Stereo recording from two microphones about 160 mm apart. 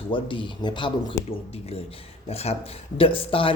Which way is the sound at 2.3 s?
40° left (ahead or behind).